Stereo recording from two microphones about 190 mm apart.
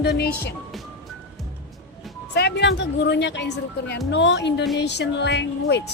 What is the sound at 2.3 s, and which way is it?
A woman's voice, 60° left (ahead or behind).